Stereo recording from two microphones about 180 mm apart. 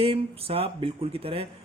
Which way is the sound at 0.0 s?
30° right (ahead or behind).